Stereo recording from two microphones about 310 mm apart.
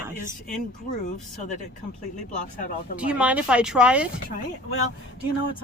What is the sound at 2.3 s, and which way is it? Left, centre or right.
Speech, left.